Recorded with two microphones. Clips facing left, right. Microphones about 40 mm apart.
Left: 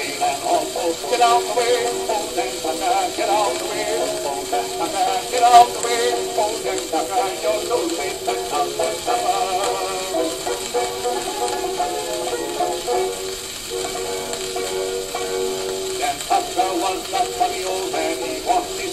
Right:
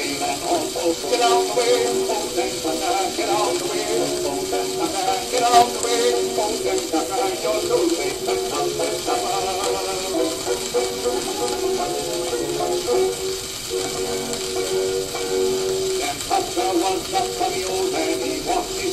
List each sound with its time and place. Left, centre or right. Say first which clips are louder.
0.2 s a sound: left 5 dB; centre
1.1 s music: left 2 dB; left
5.1 s music: left 5 dB; left
6.9 s radio: left 1 dB; centre
8.3 s music: left 2 dB; centre
12.5 s music: right 1 dB; centre
16.5 s music: even; centre